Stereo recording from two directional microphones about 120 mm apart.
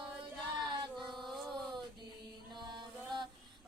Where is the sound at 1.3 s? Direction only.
Centre (ahead or behind).